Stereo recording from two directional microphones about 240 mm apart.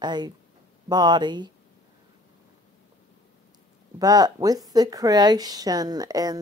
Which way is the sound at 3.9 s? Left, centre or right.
Centre.